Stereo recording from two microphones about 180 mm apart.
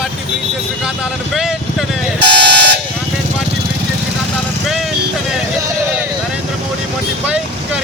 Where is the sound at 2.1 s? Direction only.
80° right.